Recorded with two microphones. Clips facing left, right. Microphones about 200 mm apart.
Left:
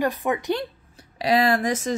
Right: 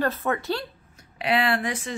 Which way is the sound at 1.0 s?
35° left (ahead or behind).